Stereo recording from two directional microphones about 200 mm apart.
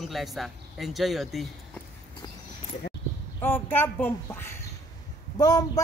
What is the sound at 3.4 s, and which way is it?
A woman's voice, 10° left (ahead or behind).